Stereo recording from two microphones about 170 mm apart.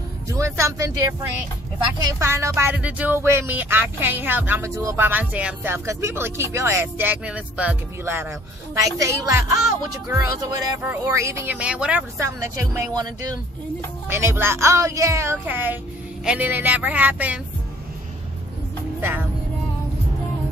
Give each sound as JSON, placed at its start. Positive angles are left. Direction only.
{"t": 0.3, "sound": "speech", "side_deg": -15}
{"t": 2.0, "sound": "speech", "side_deg": -20}
{"t": 18.9, "sound": "speech", "side_deg": -15}